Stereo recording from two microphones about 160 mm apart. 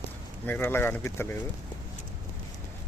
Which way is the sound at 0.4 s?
15° left (ahead or behind).